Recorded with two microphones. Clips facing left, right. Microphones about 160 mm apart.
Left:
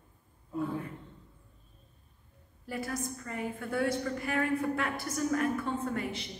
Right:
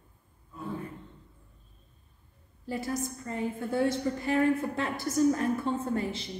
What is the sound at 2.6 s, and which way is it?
A woman's voice, 25° right (ahead or behind).